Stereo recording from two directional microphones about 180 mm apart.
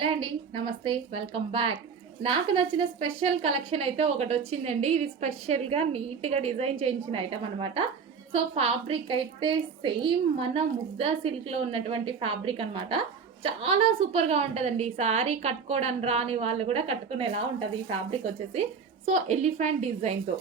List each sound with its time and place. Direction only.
0.0 s a woman's voice: 30° right (ahead or behind)
19.0 s a woman's voice: 40° right (ahead or behind)